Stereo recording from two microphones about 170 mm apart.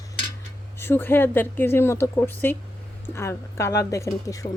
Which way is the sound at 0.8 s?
15° left (ahead or behind).